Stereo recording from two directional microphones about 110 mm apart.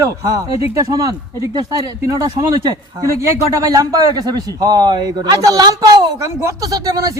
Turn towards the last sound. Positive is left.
turn(degrees=-35)  # may be behind; listen again after turning